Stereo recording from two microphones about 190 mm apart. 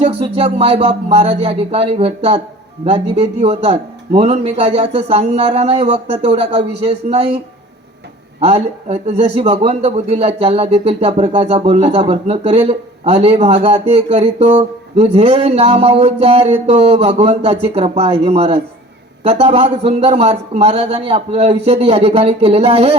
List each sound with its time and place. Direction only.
0.0 s a man's voice: 30° right (ahead or behind)
8.4 s a man's voice: 35° right (ahead or behind)